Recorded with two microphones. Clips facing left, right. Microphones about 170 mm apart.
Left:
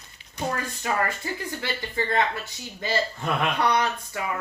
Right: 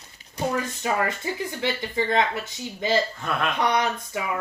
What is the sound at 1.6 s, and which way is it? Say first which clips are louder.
Speech: right 5 dB; 20° right (ahead or behind).